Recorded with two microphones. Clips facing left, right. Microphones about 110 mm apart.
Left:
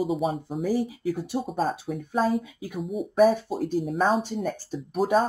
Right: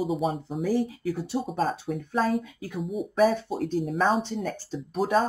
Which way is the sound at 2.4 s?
15° left (ahead or behind).